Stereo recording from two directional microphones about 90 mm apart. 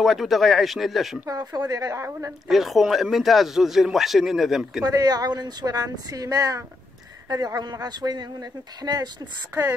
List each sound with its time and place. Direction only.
0.0 s a man's voice: centre (ahead or behind)
1.2 s speech: 50° right (ahead or behind)
2.4 s a man's voice: centre (ahead or behind)
4.8 s speech: 50° right (ahead or behind)
9.5 s speech: 30° right (ahead or behind)